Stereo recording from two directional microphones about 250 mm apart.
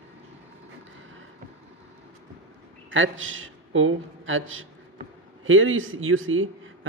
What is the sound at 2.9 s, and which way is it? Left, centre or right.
A man's voice, right.